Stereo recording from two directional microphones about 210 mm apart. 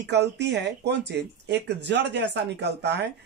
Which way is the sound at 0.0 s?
55° right (ahead or behind).